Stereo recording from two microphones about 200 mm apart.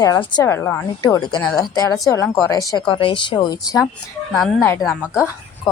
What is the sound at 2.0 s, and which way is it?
A woman's voice, 15° left (ahead or behind).